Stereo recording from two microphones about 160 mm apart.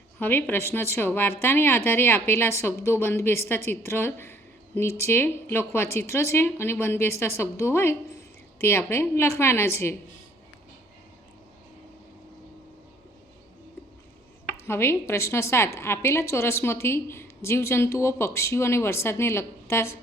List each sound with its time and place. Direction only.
0.2 s a woman's voice: 10° left (ahead or behind)
14.5 s a woman's voice: 15° left (ahead or behind)